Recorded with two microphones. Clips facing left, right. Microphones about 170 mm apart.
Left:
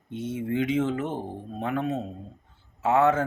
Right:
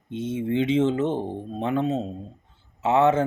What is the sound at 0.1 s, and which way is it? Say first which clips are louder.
Speech: right 3 dB; 20° right (ahead or behind).